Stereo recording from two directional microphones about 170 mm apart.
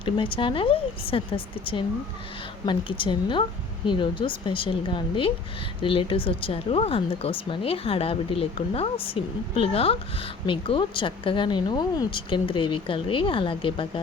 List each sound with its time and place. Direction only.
0.0 s speech: 30° left (ahead or behind)